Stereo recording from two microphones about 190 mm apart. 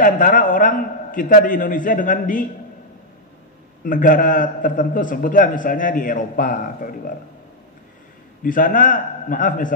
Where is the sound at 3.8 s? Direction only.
45° left (ahead or behind).